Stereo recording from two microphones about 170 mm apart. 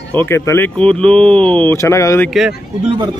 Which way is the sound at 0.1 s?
15° left (ahead or behind).